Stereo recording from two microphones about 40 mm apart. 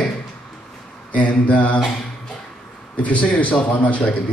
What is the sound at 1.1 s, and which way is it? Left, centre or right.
Speech, left.